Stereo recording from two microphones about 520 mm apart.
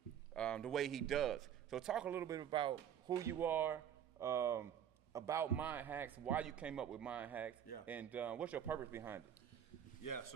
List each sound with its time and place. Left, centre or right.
0.3 s speech: centre
10.0 s speech: left